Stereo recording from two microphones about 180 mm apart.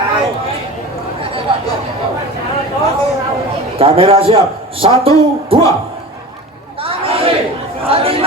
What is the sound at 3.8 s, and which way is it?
A man's voice, 30° right (ahead or behind).